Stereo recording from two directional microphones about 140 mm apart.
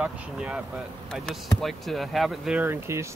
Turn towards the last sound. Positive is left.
turn(degrees=-20)  # may be behind; listen again after turning